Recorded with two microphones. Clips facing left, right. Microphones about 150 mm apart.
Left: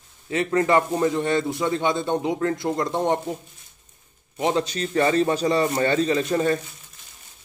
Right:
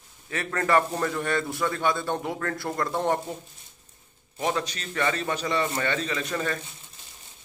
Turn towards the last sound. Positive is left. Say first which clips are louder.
# left 8 dB
turn(degrees=30)  # may be behind; listen again after turning